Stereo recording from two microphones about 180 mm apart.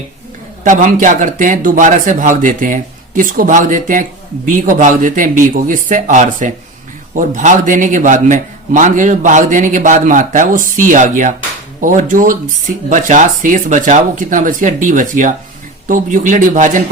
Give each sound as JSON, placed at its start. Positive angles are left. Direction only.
{"t": 0.6, "sound": "a man's voice", "side_deg": -45}